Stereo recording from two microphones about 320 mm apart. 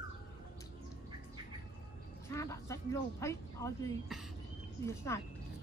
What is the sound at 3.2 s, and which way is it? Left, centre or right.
Speech, centre.